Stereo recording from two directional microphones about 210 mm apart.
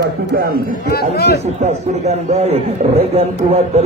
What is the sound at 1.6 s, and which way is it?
A man's voice, 30° right (ahead or behind).